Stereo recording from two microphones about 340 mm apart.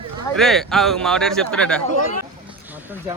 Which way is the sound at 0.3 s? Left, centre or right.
Centre.